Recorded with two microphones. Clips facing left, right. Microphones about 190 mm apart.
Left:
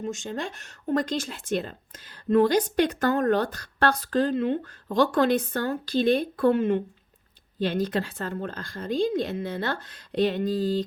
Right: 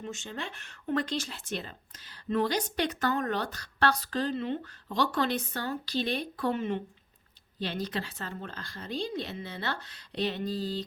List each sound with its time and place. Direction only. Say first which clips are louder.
0.0 s a woman's voice: left 7 dB; 45° left (ahead or behind)